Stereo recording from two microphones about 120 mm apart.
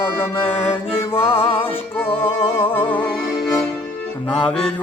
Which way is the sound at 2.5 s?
15° left (ahead or behind).